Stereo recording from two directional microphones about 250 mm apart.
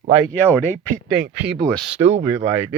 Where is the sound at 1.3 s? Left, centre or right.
Centre.